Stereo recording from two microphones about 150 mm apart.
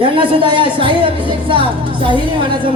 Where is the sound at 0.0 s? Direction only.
35° right (ahead or behind).